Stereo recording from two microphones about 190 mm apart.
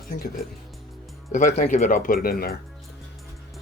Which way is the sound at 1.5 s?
40° left (ahead or behind).